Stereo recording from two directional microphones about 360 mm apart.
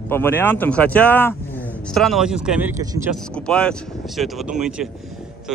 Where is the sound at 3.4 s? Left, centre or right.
Centre.